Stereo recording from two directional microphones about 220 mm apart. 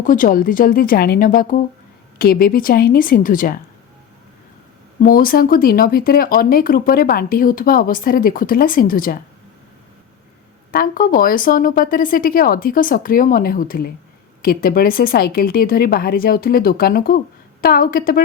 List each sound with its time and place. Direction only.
0.0 s speech: 40° left (ahead or behind)
4.9 s speech: 40° left (ahead or behind)
10.7 s speech: 40° left (ahead or behind)